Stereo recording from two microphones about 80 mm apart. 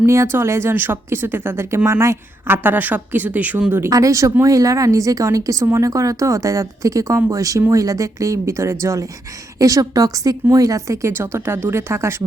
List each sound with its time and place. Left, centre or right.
0.0 s a woman's voice: right
3.8 s a woman's voice: right